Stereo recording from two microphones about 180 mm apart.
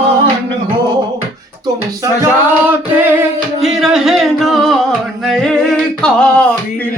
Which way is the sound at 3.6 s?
Centre (ahead or behind).